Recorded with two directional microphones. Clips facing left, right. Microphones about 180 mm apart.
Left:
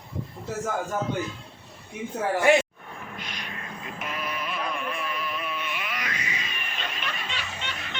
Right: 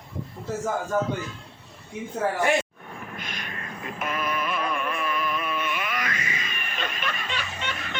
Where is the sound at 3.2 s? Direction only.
50° right (ahead or behind).